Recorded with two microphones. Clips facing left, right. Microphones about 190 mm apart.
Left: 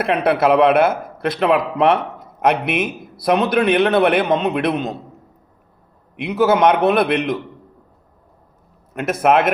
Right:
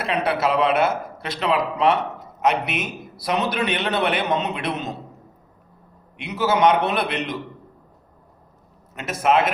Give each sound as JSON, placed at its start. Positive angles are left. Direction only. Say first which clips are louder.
{"t": 0.0, "sound": "a man's voice", "louder": "left 6 dB", "side_deg": 55}
{"t": 6.1, "sound": "a man's voice", "louder": "left 6 dB", "side_deg": 55}
{"t": 8.9, "sound": "a man's voice", "louder": "left 4 dB", "side_deg": 55}